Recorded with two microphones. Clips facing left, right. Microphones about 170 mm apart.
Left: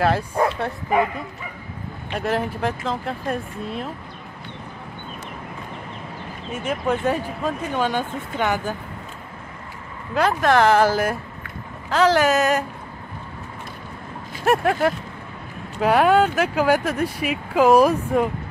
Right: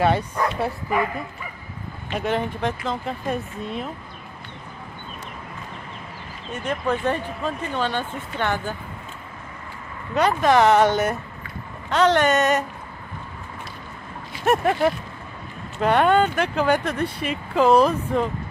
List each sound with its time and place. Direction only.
0.3 s bow-wow: 30° left (ahead or behind)
2.1 s speech: centre (ahead or behind)
6.5 s speech: 5° left (ahead or behind)
10.1 s speech: centre (ahead or behind)
14.4 s speech: centre (ahead or behind)